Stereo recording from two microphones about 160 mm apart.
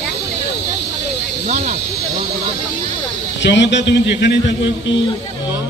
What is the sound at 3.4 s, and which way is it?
A man's voice, 90° left.